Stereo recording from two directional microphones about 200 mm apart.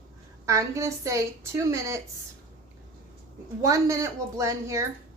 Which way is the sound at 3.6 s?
15° right (ahead or behind).